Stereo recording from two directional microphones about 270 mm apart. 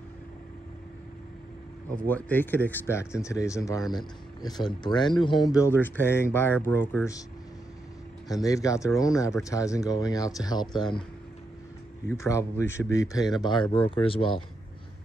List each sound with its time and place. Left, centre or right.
2.0 s speech: centre
8.3 s speech: centre
12.1 s speech: centre